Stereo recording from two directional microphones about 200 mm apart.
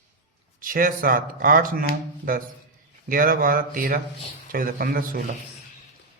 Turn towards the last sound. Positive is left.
turn(degrees=-45)  # may be behind; listen again after turning